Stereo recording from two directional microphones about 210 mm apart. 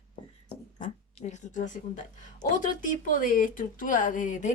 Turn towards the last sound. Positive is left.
turn(degrees=35)  # may be behind; listen again after turning